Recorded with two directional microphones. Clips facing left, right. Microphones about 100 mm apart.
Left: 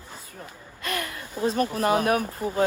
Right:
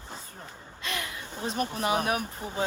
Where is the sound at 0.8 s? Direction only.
50° left (ahead or behind).